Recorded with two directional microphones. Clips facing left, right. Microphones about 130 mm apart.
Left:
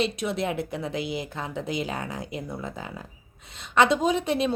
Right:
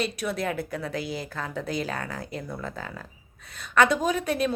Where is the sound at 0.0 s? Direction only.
25° left (ahead or behind).